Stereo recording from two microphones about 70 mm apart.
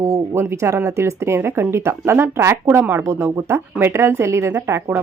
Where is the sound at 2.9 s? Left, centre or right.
Right.